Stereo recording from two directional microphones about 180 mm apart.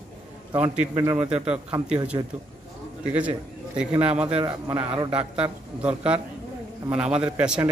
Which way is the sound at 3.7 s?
5° right (ahead or behind).